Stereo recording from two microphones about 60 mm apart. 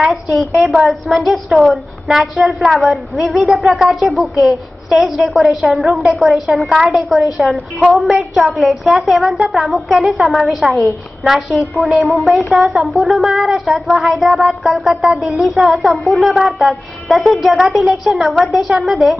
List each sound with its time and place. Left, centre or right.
0.0 s speech: centre
0.6 s a woman's voice: centre
0.8 s speech: centre